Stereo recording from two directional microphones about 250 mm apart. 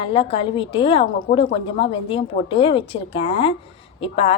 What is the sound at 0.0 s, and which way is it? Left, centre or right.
Speech, left.